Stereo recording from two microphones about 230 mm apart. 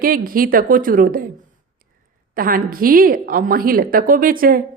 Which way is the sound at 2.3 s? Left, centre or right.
Right.